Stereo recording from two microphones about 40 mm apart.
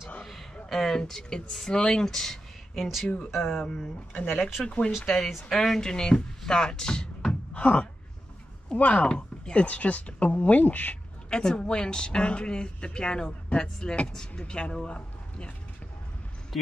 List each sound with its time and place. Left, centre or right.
0.2 s a sound: centre
0.7 s a woman's voice: centre
2.0 s a sound: centre
3.6 s speech: centre
4.1 s speech: left
4.6 s speech: left
5.0 s a woman's voice: centre; by 11.0 s left
11.2 s a woman's voice: left